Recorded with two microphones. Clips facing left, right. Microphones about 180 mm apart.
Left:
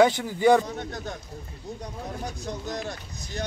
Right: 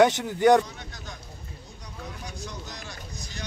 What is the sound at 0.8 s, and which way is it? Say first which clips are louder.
Speech: left 9 dB; 55° left (ahead or behind).